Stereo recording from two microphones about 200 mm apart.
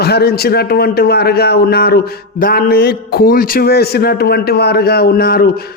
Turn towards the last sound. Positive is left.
turn(degrees=50)  # may be behind; listen again after turning